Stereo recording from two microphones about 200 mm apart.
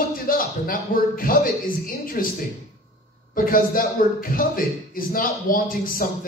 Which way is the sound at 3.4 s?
45° left (ahead or behind).